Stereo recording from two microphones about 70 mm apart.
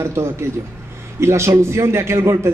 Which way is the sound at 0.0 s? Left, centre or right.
Right.